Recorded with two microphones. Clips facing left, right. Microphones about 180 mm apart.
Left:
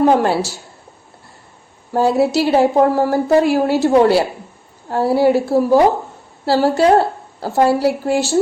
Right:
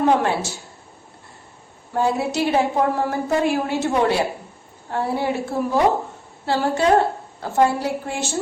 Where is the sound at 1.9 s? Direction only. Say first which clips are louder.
Left 7 dB; 35° left (ahead or behind).